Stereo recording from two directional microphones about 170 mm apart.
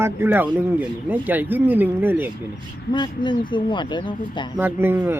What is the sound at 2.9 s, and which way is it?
Speech, 25° left (ahead or behind).